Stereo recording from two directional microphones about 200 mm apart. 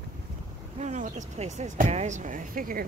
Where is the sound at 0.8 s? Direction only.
35° right (ahead or behind).